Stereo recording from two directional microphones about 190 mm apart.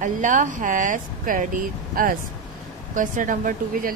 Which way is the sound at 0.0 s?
45° right (ahead or behind).